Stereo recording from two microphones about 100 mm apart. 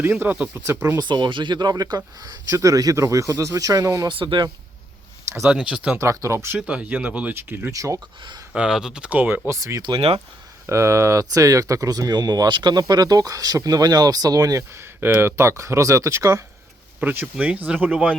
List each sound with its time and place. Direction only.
0.0 s speech: 20° right (ahead or behind)
0.9 s speech: 45° right (ahead or behind)
4.1 s speech: 55° right (ahead or behind)
5.5 s speech: 10° right (ahead or behind)
6.0 s speech: 30° right (ahead or behind)
6.6 s speech: 10° right (ahead or behind)
7.7 s speech: 35° right (ahead or behind)
8.5 s speech: 5° right (ahead or behind)
9.5 s speech: 30° right (ahead or behind)
14.8 s speech: 20° right (ahead or behind)
17.0 s speech: 15° right (ahead or behind)